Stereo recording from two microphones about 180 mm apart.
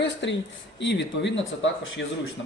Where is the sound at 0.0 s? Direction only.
85° left.